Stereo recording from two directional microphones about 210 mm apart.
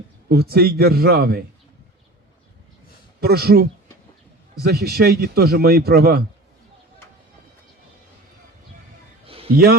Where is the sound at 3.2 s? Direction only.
50° right (ahead or behind).